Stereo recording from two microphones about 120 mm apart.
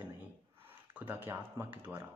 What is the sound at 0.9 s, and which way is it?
Speech, 15° right (ahead or behind).